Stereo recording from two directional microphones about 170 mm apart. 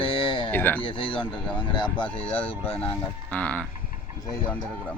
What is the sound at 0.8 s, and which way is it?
Speech, 30° left (ahead or behind).